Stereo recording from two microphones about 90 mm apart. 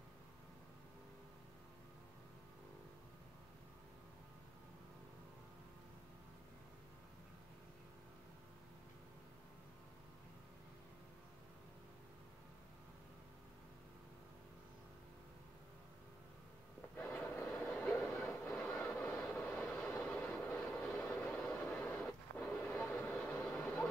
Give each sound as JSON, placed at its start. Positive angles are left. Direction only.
{"t": 17.2, "sound": "train", "side_deg": 10}
{"t": 17.7, "sound": "train", "side_deg": 20}
{"t": 18.7, "sound": "vehicle", "side_deg": 5}
{"t": 19.4, "sound": "vehicle", "side_deg": 20}